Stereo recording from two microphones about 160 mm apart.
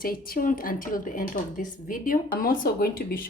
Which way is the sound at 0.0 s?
60° left (ahead or behind).